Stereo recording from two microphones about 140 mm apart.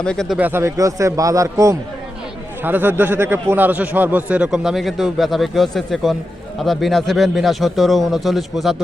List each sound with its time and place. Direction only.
0.0 s speech: 5° left (ahead or behind)
0.3 s a man's voice: 15° right (ahead or behind)